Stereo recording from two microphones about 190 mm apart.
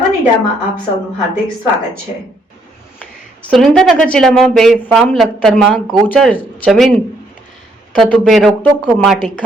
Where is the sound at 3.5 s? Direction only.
5° left (ahead or behind).